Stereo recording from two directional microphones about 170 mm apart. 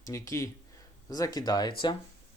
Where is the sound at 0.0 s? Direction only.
20° left (ahead or behind).